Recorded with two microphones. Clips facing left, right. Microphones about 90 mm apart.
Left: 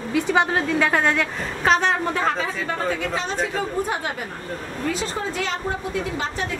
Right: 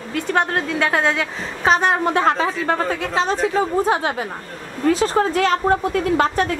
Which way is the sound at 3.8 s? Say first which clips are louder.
Right 7 dB; 90° right.